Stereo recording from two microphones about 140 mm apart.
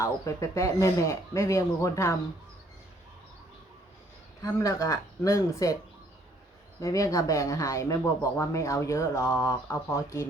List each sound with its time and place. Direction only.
0.0 s speech: 20° left (ahead or behind)
4.4 s speech: 25° left (ahead or behind)
6.7 s speech: 25° left (ahead or behind)